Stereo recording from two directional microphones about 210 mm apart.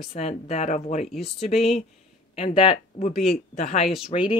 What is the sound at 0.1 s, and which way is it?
A woman's voice, 30° left (ahead or behind).